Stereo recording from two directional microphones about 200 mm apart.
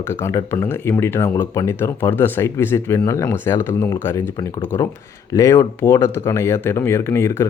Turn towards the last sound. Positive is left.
turn(degrees=10)  # may be behind; listen again after turning